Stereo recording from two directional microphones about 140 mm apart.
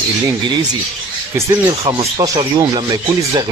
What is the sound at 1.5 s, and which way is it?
Speech, 25° right (ahead or behind).